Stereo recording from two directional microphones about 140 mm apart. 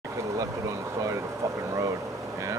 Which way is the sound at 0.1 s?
20° right (ahead or behind).